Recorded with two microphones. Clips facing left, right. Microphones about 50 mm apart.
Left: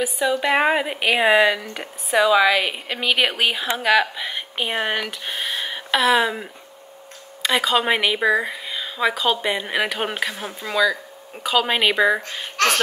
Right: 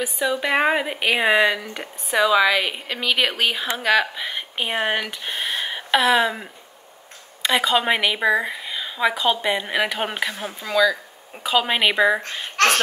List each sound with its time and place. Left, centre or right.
0.0 s a woman's voice: centre
11.4 s a woman's voice: centre
12.5 s a sound: right